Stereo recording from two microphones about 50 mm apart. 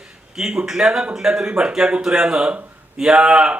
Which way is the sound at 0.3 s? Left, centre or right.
Centre.